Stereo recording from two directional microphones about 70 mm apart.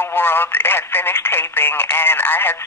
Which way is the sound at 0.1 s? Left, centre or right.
Left.